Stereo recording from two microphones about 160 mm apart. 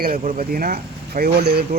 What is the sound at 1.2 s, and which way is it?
Speech, 75° right (ahead or behind).